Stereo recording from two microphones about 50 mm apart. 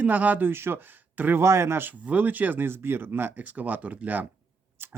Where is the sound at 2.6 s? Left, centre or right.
Right.